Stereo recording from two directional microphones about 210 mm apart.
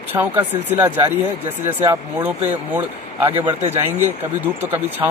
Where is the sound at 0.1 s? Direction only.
15° right (ahead or behind).